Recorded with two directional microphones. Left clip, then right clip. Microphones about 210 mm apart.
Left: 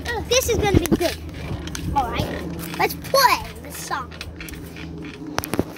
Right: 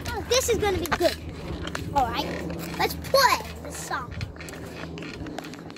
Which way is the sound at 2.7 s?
25° left (ahead or behind).